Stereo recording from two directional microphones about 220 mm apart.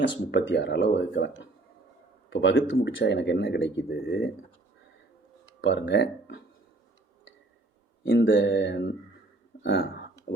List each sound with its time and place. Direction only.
0.0 s speech: 50° left (ahead or behind)
2.3 s speech: 55° left (ahead or behind)
5.6 s speech: 55° left (ahead or behind)
8.0 s speech: 60° left (ahead or behind)
9.5 s a sound: 50° left (ahead or behind)